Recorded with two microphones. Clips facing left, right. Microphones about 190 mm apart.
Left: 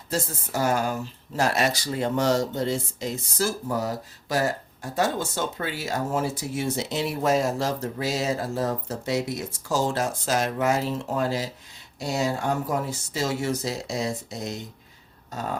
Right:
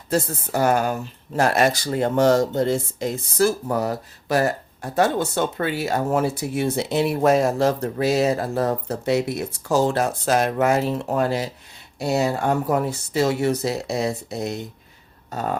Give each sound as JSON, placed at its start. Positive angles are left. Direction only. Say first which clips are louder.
{"t": 0.1, "sound": "speech", "louder": "right 6 dB", "side_deg": -60}